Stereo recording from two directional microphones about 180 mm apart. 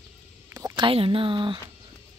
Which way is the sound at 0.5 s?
15° right (ahead or behind).